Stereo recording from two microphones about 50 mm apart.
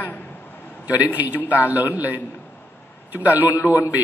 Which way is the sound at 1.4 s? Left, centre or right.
Right.